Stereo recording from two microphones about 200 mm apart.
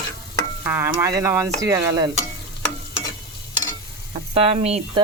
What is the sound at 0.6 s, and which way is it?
Speech, 10° right (ahead or behind).